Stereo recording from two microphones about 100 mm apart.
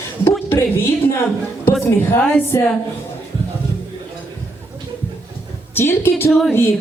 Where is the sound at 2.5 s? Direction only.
30° left (ahead or behind).